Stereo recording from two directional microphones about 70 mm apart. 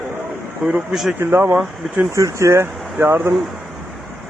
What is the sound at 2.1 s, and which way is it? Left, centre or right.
Speech, right.